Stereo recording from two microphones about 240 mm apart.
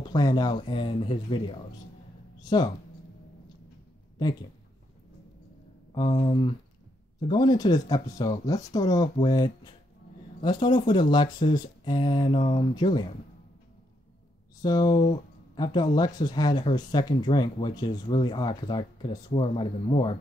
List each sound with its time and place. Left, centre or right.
0.0 s speech: centre
4.2 s speech: centre
5.9 s speech: centre
14.6 s speech: centre